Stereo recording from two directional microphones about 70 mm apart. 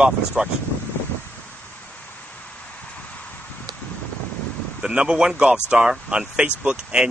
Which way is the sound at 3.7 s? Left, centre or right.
Right.